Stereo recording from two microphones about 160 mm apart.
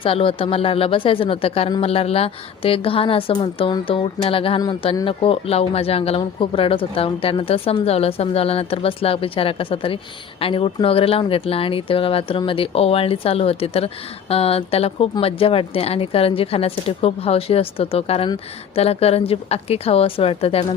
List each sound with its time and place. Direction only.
0.0 s speech: 35° left (ahead or behind)